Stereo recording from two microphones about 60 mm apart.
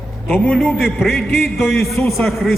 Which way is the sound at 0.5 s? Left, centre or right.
Centre.